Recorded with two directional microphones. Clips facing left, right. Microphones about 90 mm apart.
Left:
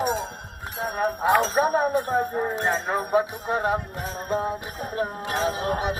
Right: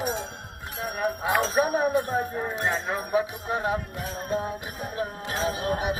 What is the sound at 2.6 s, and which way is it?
Speech, 40° left (ahead or behind).